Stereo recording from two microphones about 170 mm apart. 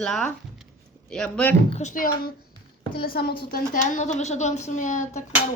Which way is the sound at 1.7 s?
45° left (ahead or behind).